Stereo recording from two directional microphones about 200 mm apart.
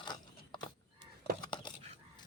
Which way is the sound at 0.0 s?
20° left (ahead or behind).